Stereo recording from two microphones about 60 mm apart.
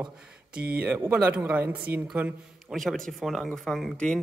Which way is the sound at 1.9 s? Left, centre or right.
Right.